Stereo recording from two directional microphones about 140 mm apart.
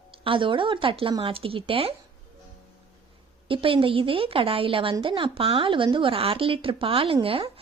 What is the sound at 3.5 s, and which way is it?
A woman's voice, 40° right (ahead or behind).